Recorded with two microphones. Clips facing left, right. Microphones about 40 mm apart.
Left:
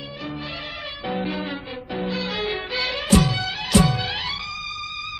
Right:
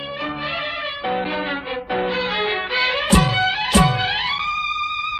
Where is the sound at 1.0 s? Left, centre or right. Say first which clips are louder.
Right 3 dB; right.